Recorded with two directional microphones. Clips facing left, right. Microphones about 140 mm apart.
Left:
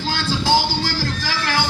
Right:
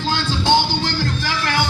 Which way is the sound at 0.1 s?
25° right (ahead or behind).